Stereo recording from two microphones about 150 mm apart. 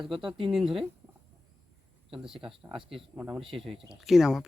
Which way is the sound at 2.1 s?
5° right (ahead or behind).